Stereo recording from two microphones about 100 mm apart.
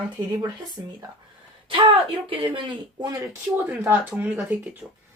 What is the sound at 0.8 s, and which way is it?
Speech, 35° right (ahead or behind).